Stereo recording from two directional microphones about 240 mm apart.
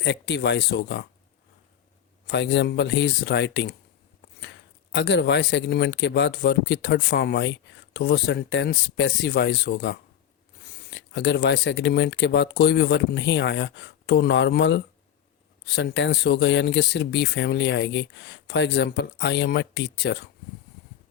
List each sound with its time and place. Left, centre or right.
0.0 s speech: left
2.2 s speech: left
4.9 s speech: left